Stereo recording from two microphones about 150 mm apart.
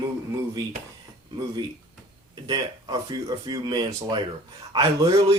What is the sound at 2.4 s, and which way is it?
A man's voice, 25° right (ahead or behind).